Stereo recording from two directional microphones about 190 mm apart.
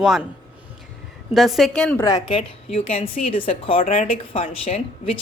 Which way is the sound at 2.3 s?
30° left (ahead or behind).